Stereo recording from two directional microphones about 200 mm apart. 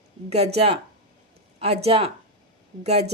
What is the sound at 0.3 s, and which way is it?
A woman's voice, 30° right (ahead or behind).